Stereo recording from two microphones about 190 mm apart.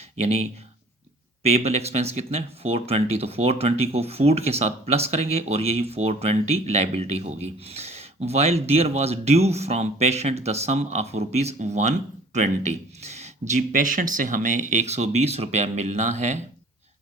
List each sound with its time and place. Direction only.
0.2 s speech: 35° right (ahead or behind)
1.5 s speech: 35° right (ahead or behind)